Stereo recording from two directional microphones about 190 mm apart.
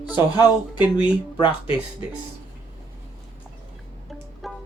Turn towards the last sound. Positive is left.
turn(degrees=0)  # may be behind; listen again after turning